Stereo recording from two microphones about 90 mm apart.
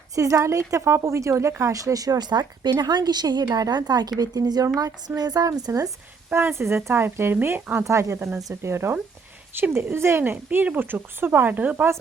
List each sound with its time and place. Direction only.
0.2 s a woman's voice: 35° right (ahead or behind)
6.3 s speech: 30° right (ahead or behind)